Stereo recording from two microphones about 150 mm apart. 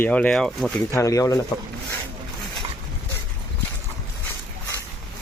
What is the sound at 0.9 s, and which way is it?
Speech, 20° left (ahead or behind).